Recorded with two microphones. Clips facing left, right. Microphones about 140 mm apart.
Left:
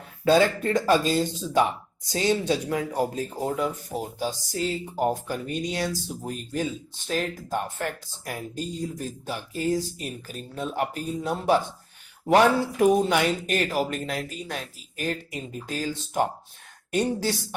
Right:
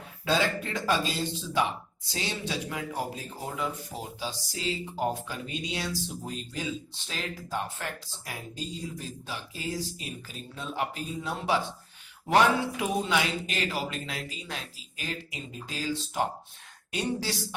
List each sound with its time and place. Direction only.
0.3 s speech: 45° left (ahead or behind)